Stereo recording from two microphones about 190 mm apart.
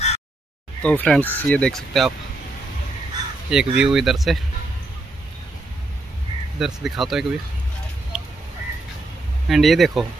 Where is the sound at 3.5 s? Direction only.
5° right (ahead or behind).